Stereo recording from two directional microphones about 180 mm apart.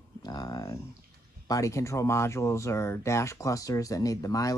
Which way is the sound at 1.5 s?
15° left (ahead or behind).